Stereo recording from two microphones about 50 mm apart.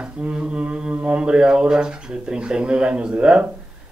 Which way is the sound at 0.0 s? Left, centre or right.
Right.